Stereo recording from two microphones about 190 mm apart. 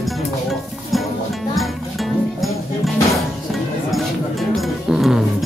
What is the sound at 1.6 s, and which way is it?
Music, centre (ahead or behind).